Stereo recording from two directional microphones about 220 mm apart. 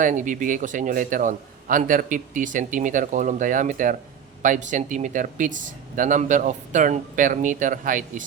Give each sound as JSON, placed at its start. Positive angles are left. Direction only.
{"t": 0.0, "sound": "a man's voice", "side_deg": -35}